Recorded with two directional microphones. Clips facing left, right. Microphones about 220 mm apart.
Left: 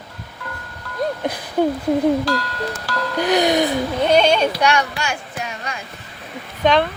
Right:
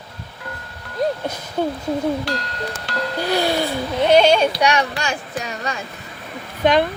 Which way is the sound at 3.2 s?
15° left (ahead or behind).